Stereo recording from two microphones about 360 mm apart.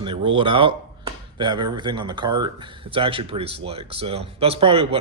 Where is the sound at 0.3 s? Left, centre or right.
Centre.